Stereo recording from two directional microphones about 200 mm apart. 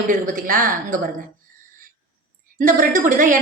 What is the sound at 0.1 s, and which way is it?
Speech, 45° right (ahead or behind).